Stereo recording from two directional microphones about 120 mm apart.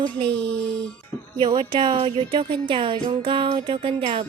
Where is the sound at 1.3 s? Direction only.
40° right (ahead or behind).